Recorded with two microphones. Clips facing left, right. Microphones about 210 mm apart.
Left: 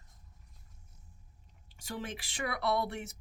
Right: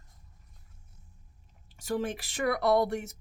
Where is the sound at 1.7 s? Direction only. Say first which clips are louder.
Right 9 dB; 45° right (ahead or behind).